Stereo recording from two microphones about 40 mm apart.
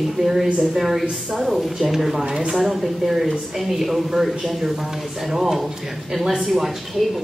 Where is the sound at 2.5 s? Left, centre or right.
Centre.